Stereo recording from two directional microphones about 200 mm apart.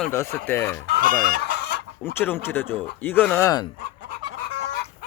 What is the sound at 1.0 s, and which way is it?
Chicken, 45° right (ahead or behind).